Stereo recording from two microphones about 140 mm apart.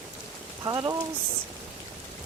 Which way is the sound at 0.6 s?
25° right (ahead or behind).